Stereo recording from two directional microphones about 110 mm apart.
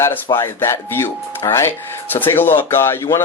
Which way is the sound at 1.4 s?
35° left (ahead or behind).